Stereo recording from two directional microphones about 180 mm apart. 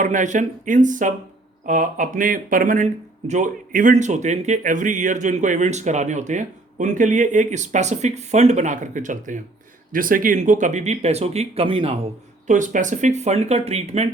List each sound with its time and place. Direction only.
0.0 s speech: 45° right (ahead or behind)
12.5 s speech: 45° right (ahead or behind)